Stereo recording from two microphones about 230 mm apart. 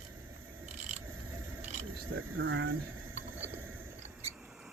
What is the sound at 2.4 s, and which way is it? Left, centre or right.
Speech, right.